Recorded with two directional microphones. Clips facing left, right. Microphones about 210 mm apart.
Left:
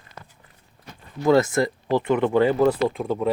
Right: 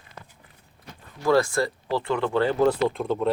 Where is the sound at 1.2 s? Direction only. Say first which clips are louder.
Left 3 dB; 20° left (ahead or behind).